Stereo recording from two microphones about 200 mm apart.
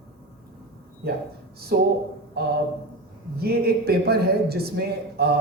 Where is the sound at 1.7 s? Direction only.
50° right (ahead or behind).